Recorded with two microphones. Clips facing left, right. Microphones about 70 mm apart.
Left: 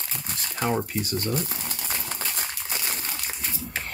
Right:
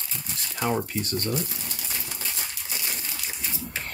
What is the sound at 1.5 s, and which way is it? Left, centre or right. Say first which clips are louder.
Crumpling: left 3 dB; left.